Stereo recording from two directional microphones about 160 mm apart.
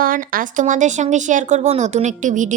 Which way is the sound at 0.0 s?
60° right (ahead or behind).